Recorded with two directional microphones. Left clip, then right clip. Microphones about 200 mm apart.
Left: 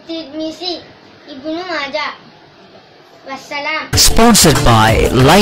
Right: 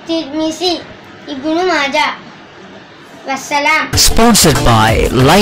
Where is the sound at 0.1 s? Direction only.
10° left (ahead or behind).